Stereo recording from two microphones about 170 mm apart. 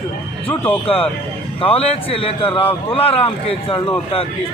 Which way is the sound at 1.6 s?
35° left (ahead or behind).